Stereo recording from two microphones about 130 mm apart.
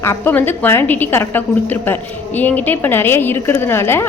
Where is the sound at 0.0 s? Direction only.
15° left (ahead or behind).